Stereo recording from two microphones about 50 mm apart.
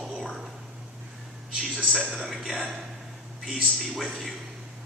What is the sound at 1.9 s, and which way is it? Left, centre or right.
Speech, centre.